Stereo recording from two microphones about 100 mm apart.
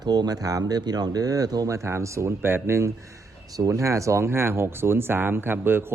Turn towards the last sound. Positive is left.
turn(degrees=-20)  # may be behind; listen again after turning